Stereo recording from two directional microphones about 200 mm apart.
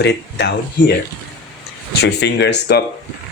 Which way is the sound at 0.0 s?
60° left (ahead or behind).